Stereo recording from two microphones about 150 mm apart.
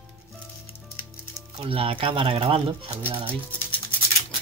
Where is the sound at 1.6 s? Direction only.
40° right (ahead or behind).